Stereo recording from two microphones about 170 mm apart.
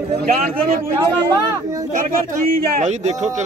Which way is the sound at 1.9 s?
55° right (ahead or behind).